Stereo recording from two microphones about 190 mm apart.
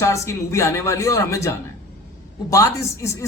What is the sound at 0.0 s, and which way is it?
Speech, 15° left (ahead or behind).